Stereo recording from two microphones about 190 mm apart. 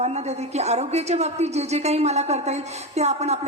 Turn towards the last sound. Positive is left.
turn(degrees=-35)  # may be behind; listen again after turning